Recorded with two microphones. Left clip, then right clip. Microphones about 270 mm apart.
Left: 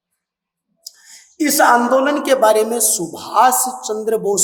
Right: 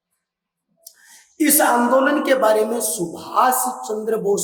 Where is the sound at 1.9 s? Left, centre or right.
Left.